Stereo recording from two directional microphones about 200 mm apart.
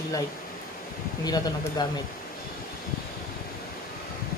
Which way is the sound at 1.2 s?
20° left (ahead or behind).